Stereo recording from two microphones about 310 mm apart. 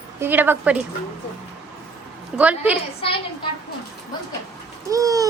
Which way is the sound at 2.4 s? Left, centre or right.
Centre.